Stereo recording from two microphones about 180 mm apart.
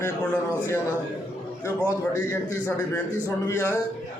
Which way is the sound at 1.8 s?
15° left (ahead or behind).